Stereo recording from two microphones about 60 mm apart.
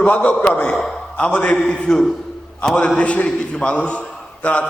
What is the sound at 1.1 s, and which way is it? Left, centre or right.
A man's voice, left.